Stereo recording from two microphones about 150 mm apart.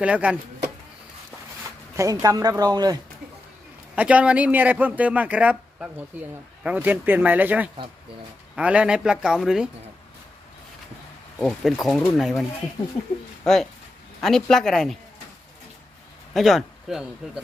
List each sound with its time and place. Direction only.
0.0 s a man's voice: 10° right (ahead or behind)
2.0 s speech: 20° right (ahead or behind)
3.9 s a man's voice: 10° right (ahead or behind)
11.4 s speech: centre (ahead or behind)
16.3 s speech: centre (ahead or behind)